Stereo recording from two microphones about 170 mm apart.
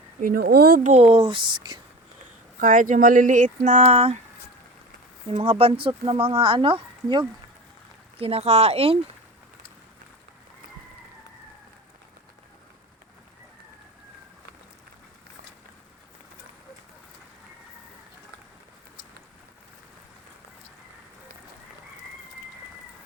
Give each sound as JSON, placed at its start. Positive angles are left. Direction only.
{"t": 0.2, "sound": "speech", "side_deg": -60}
{"t": 0.8, "sound": "speech", "side_deg": -40}
{"t": 2.6, "sound": "speech", "side_deg": -50}
{"t": 5.3, "sound": "speech", "side_deg": -30}